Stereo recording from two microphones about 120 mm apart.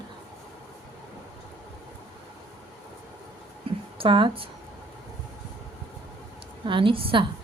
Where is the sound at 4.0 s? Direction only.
45° right (ahead or behind).